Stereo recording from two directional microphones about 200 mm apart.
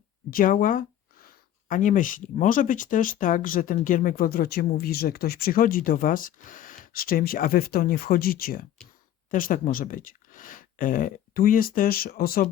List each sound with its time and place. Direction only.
0.3 s speech: 45° left (ahead or behind)